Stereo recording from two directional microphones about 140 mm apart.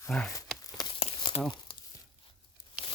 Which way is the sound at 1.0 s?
40° left (ahead or behind).